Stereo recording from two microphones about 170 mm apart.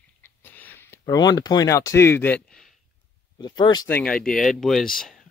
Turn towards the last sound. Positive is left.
turn(degrees=0)  # may be behind; listen again after turning